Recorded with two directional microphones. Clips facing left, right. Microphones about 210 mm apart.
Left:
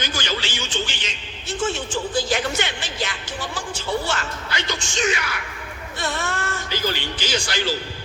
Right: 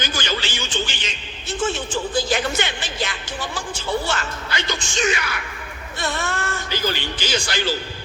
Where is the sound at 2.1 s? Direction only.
55° right (ahead or behind).